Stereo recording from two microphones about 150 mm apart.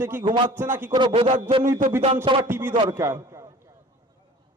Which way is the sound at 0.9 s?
30° right (ahead or behind).